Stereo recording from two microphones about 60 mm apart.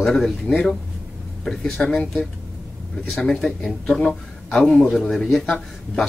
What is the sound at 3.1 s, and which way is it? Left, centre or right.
A man's voice, centre.